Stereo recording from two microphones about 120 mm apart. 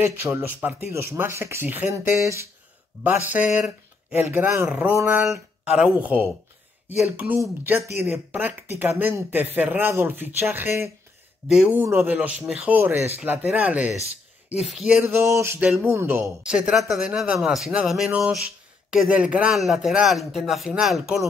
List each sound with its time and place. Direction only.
0.0 s speech: 20° right (ahead or behind)
3.0 s speech: 15° right (ahead or behind)
11.4 s speech: 5° right (ahead or behind)
11.8 s speech: 20° right (ahead or behind)
15.0 s speech: 25° right (ahead or behind)
16.4 s speech: 10° right (ahead or behind)